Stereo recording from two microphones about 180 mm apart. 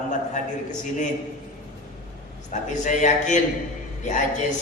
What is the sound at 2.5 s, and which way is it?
Speech, 40° left (ahead or behind).